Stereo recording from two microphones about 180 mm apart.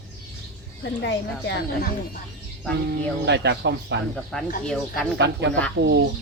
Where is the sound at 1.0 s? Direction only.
75° left (ahead or behind).